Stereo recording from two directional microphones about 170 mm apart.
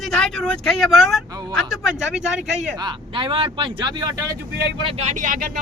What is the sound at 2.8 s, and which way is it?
Speech, 30° right (ahead or behind).